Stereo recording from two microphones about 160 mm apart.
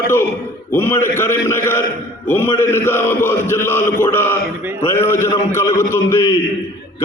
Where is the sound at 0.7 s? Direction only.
15° left (ahead or behind).